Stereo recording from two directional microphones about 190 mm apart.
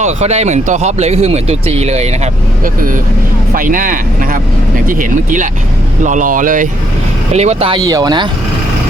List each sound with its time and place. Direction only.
0.0 s speech: 35° right (ahead or behind)
2.6 s speech: 45° right (ahead or behind)
7.3 s speech: 35° right (ahead or behind)